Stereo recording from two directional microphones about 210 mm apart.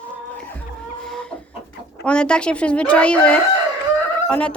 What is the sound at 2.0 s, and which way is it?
A woman's voice, 5° left (ahead or behind).